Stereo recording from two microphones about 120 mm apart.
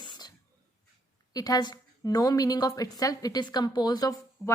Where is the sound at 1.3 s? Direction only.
30° left (ahead or behind).